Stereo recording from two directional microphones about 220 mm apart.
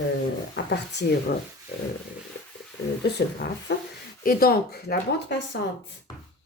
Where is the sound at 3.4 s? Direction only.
55° left (ahead or behind).